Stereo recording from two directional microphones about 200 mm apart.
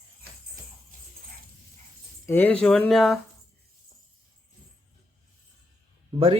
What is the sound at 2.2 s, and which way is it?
Speech, 10° left (ahead or behind).